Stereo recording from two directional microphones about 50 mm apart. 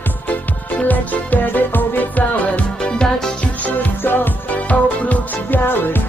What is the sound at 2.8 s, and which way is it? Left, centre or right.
Music, centre.